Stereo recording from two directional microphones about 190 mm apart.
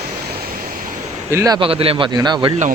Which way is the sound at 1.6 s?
30° right (ahead or behind).